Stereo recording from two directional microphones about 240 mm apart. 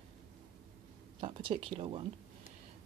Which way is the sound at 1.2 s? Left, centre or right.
Right.